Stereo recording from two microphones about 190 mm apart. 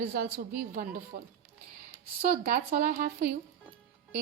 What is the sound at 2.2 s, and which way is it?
A woman's voice, 50° right (ahead or behind).